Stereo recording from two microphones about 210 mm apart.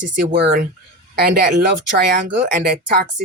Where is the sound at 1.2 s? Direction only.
45° right (ahead or behind).